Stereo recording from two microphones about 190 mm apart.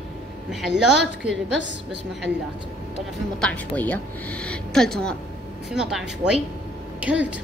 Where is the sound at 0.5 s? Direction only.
Centre (ahead or behind).